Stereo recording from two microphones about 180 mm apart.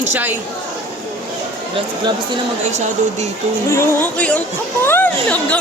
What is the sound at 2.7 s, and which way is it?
Speech, 40° right (ahead or behind).